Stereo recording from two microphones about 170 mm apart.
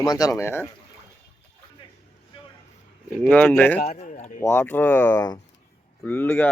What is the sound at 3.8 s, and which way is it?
Speech, 45° left (ahead or behind).